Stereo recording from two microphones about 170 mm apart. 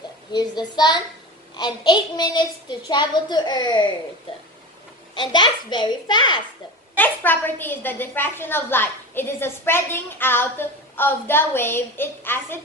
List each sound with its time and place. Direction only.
0.3 s a child's voice: 25° left (ahead or behind)
5.1 s a child's voice: 25° left (ahead or behind)
7.0 s a woman's voice: 10° left (ahead or behind)